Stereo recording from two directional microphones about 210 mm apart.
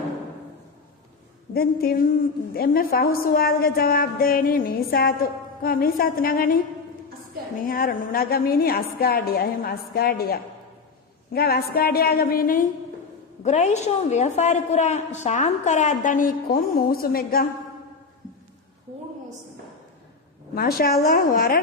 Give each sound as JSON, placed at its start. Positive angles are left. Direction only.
{"t": 1.5, "sound": "a woman's voice", "side_deg": 45}
{"t": 7.7, "sound": "a woman's voice", "side_deg": 45}
{"t": 20.6, "sound": "a woman's voice", "side_deg": 45}